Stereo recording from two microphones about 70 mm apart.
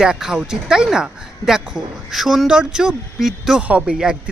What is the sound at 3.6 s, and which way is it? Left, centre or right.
Speech, centre.